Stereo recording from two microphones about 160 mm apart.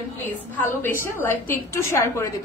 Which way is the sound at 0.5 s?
15° left (ahead or behind).